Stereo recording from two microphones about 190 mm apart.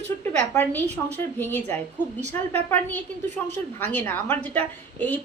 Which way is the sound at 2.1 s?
35° right (ahead or behind).